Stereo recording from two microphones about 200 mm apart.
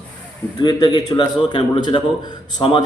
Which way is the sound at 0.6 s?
20° left (ahead or behind).